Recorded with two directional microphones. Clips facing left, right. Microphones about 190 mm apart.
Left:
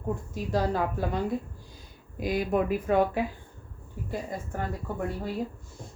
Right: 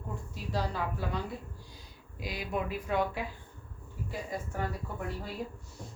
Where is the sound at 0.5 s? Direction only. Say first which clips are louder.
Left 7 dB; 50° left (ahead or behind).